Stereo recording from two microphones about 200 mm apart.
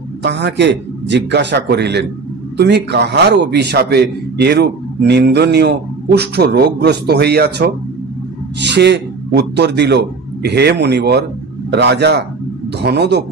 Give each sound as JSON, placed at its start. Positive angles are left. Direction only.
{"t": 0.2, "sound": "a man's voice", "side_deg": -60}